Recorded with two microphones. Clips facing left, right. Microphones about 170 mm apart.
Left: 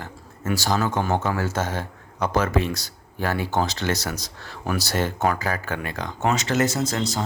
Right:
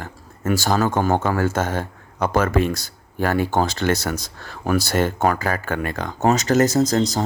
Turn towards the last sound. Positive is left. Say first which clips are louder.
# right 6 dB
turn(degrees=-40)  # may be behind; listen again after turning